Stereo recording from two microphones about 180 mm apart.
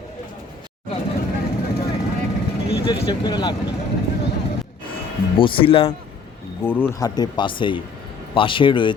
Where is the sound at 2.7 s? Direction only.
25° left (ahead or behind).